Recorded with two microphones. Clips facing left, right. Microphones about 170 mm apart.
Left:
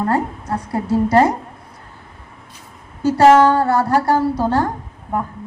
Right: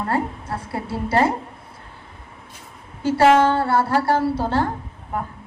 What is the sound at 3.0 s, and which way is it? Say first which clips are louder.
A woman's voice: left 4 dB; 45° left (ahead or behind).